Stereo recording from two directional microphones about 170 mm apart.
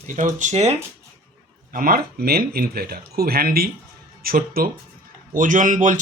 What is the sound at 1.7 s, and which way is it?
Speech, 60° right (ahead or behind).